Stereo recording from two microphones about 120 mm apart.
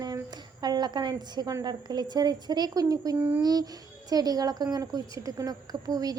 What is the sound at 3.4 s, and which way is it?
A woman's voice, 30° right (ahead or behind).